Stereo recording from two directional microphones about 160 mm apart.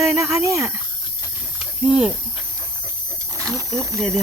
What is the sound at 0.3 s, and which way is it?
Speech, 20° right (ahead or behind).